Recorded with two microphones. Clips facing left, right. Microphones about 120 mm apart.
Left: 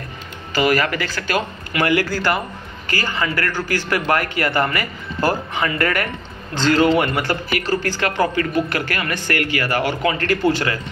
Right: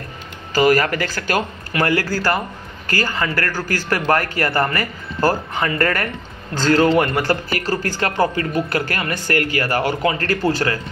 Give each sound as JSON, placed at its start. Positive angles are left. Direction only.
{"t": 0.5, "sound": "speech", "side_deg": -40}